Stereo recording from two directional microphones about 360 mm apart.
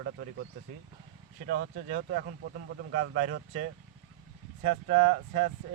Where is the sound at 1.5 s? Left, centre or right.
Right.